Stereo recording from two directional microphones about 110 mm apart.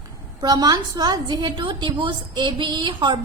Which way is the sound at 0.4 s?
35° right (ahead or behind).